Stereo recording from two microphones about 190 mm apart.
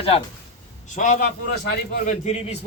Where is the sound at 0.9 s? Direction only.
40° left (ahead or behind).